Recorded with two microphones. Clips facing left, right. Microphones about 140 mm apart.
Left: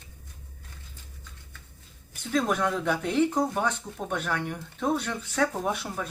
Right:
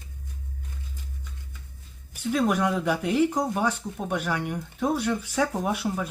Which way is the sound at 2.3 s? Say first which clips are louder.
Right 2 dB; 10° right (ahead or behind).